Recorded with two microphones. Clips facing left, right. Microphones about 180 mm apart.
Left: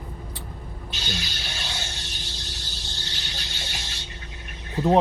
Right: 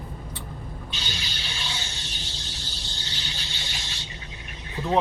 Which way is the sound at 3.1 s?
45° left (ahead or behind).